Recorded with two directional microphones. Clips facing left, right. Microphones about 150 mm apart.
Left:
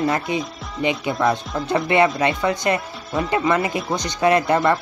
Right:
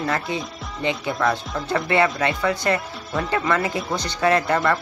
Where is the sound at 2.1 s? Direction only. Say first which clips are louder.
Left 2 dB; 20° left (ahead or behind).